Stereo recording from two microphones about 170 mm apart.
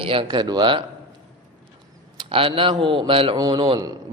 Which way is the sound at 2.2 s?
30° right (ahead or behind).